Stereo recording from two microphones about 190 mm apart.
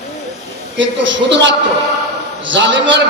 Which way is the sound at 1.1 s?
70° right (ahead or behind).